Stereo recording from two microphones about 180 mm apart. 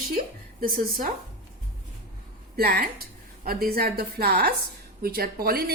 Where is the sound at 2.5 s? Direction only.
60° right (ahead or behind).